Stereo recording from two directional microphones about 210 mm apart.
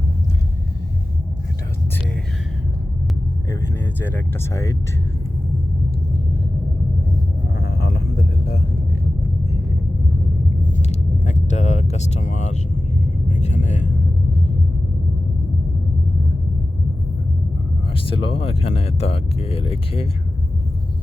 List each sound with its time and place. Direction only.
4.0 s speech: 10° left (ahead or behind)
7.6 s a sound: 50° left (ahead or behind)
10.6 s vehicle: 35° left (ahead or behind)
13.2 s speech: 35° left (ahead or behind)
17.9 s speech: 25° left (ahead or behind)